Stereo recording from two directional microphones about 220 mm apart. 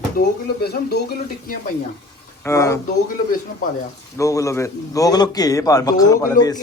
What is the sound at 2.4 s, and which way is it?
Speech, 15° left (ahead or behind).